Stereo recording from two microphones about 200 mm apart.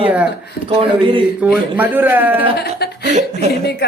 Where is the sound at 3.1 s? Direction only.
35° right (ahead or behind).